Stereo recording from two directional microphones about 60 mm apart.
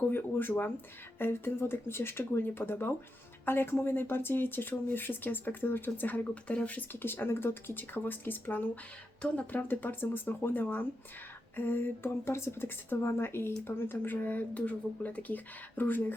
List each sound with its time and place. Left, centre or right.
0.1 s speech: left
6.9 s speech: left